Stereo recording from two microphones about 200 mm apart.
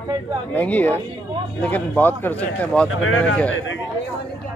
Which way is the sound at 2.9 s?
90° left.